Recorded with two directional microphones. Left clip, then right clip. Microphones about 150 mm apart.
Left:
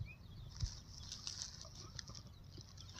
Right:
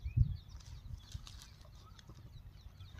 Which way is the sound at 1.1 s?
Centre (ahead or behind).